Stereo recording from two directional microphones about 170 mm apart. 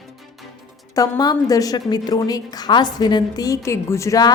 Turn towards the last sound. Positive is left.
turn(degrees=20)  # may be behind; listen again after turning